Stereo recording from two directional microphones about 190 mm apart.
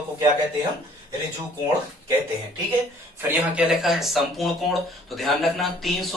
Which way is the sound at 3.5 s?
5° right (ahead or behind).